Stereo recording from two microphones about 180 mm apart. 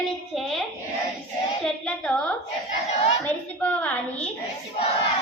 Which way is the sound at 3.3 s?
10° left (ahead or behind).